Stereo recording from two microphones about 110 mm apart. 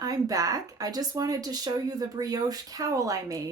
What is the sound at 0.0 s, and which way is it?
Speech, 35° right (ahead or behind).